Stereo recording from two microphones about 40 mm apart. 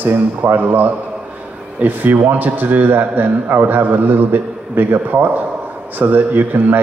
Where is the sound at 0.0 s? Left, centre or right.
Right.